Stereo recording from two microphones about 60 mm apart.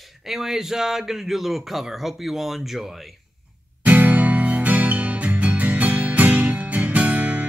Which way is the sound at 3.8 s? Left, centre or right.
Right.